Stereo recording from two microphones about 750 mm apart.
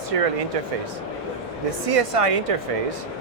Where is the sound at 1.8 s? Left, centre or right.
Right.